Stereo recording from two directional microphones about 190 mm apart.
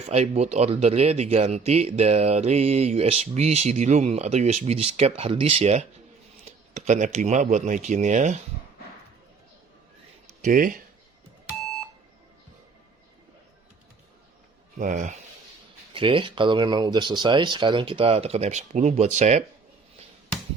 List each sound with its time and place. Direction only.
0.0 s speech: 35° right (ahead or behind)
10.4 s speech: 45° right (ahead or behind)
14.8 s speech: 40° right (ahead or behind)
15.9 s speech: 25° right (ahead or behind)